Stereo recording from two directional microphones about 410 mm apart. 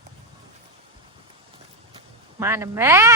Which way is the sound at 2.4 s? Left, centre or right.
Centre.